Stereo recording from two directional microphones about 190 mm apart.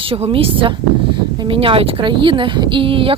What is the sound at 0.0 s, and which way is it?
Speech, 30° right (ahead or behind).